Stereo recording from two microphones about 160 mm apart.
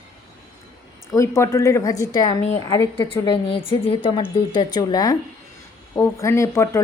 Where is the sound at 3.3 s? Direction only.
30° left (ahead or behind).